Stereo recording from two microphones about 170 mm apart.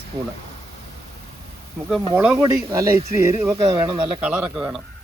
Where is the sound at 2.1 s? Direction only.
15° right (ahead or behind).